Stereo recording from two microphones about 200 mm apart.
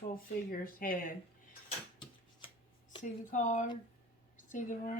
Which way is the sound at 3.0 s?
40° left (ahead or behind).